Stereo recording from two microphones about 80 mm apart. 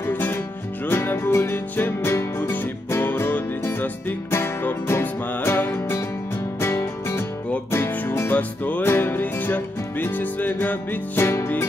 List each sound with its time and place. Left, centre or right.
0.0 s music: left